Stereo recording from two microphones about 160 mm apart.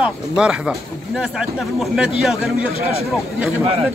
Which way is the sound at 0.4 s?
5° right (ahead or behind).